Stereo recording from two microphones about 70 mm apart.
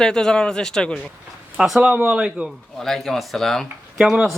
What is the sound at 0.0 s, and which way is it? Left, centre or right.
Speech, centre.